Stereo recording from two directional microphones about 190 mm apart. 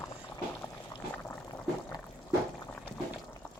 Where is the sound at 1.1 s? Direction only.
10° left (ahead or behind).